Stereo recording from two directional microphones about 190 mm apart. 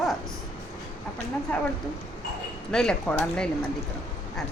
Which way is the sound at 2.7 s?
5° left (ahead or behind).